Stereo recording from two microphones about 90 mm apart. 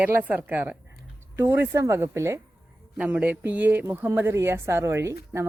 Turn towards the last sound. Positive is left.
turn(degrees=-35)  # may be behind; listen again after turning